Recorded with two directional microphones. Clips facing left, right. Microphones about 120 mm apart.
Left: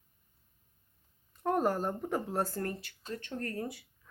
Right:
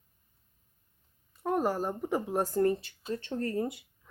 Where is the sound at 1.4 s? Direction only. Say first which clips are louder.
Right 1 dB; 5° right (ahead or behind).